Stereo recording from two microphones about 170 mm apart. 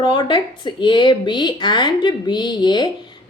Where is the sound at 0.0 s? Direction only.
30° left (ahead or behind).